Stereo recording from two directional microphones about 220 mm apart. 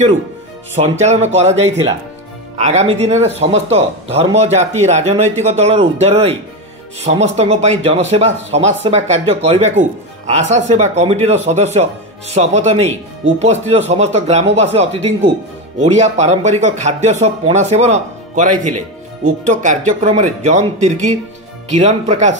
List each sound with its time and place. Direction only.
0.7 s speech: 30° right (ahead or behind)